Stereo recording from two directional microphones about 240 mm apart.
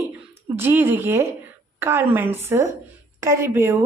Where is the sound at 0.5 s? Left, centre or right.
Centre.